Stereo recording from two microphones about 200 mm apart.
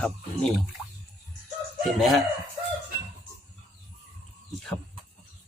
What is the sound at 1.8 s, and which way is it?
Speech, centre (ahead or behind).